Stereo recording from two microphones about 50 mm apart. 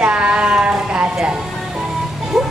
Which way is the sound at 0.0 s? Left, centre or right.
Right.